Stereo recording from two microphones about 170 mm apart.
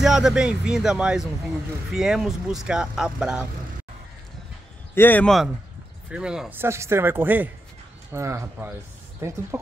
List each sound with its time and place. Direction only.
0.0 s speech: 5° right (ahead or behind)
4.9 s speech: 10° left (ahead or behind); by 8.7 s 15° right (ahead or behind)